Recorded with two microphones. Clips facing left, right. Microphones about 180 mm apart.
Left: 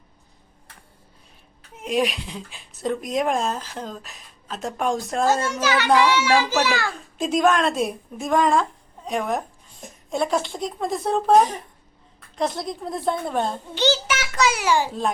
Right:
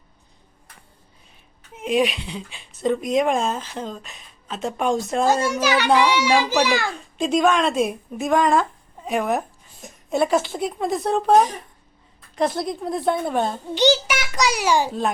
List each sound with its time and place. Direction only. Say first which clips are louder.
1.7 s speech: right 2 dB; centre (ahead or behind)
5.2 s a child's voice: right 1 dB; 15° right (ahead or behind)
7.2 s speech: right 1 dB; centre (ahead or behind)
13.7 s a child's voice: right 4 dB; 15° right (ahead or behind)